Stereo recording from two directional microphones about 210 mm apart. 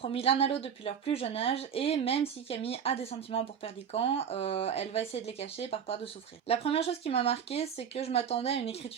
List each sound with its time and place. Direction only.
0.0 s speech: 25° left (ahead or behind)